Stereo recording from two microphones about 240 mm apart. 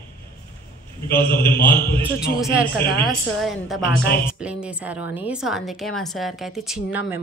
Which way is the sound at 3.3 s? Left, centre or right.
Centre.